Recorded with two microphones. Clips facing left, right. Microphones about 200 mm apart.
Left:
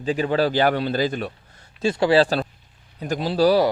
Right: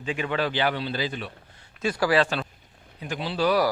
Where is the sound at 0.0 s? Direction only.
35° left (ahead or behind).